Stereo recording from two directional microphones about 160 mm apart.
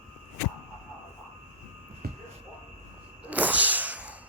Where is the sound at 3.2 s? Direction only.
10° right (ahead or behind).